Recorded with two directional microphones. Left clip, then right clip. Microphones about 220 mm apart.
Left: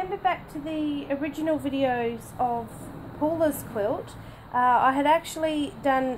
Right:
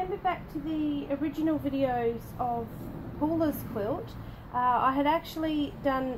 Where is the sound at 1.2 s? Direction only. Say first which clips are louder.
Left 2 dB; 30° left (ahead or behind).